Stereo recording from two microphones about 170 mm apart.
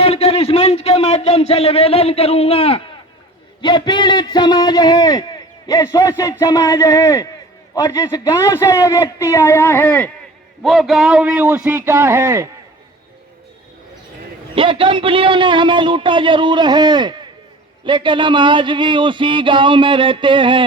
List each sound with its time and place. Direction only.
0.0 s a man's voice: 35° left (ahead or behind); by 10.1 s 10° left (ahead or behind)
10.6 s a man's voice: centre (ahead or behind)
14.5 s a sound: 30° right (ahead or behind)